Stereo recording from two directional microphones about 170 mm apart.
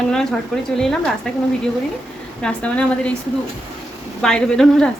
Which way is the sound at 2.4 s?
5° left (ahead or behind).